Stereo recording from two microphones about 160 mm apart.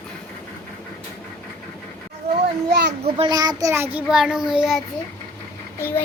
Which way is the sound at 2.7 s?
90° right.